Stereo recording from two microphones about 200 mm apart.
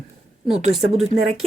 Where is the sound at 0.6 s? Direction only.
30° right (ahead or behind).